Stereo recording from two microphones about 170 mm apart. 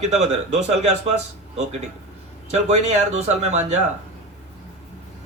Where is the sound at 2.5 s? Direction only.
40° right (ahead or behind).